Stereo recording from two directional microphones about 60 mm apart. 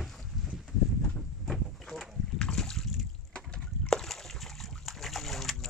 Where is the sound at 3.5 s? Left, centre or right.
Centre.